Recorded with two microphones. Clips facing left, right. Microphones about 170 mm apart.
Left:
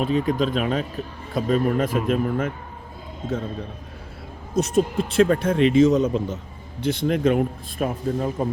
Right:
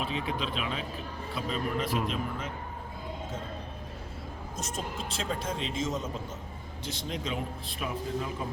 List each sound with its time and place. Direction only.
0.0 s speech: 45° left (ahead or behind)
4.5 s a man's voice: 65° left (ahead or behind)
6.8 s a man's voice: 60° left (ahead or behind)